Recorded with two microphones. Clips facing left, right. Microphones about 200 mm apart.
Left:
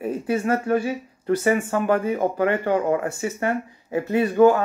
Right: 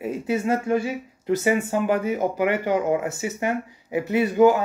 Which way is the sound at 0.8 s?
20° right (ahead or behind).